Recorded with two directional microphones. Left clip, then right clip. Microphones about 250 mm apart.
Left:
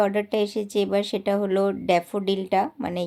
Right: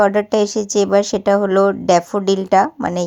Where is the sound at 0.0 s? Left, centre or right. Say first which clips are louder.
Right 8 dB; centre.